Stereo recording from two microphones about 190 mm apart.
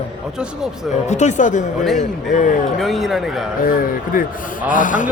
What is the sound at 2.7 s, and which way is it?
Speech, centre (ahead or behind).